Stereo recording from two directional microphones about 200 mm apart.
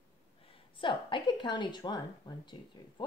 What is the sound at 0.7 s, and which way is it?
A woman's voice, 25° left (ahead or behind).